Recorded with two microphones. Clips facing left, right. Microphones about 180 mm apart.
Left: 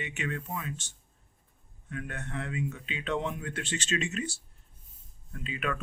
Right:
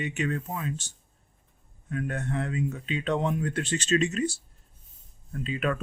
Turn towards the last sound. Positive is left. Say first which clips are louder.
# right 5 dB
turn(degrees=-35)  # may be behind; listen again after turning